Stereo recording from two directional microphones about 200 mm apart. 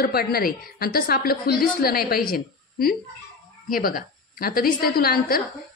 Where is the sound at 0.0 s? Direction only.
50° left (ahead or behind).